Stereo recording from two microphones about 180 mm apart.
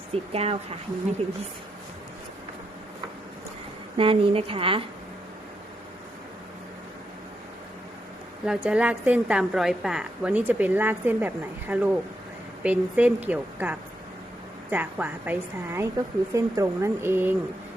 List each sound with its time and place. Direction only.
0.1 s a woman's voice: 35° right (ahead or behind)
3.9 s a woman's voice: 30° right (ahead or behind)
8.4 s a woman's voice: 5° right (ahead or behind)